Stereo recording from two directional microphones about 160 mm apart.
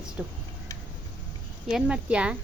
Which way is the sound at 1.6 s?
5° right (ahead or behind).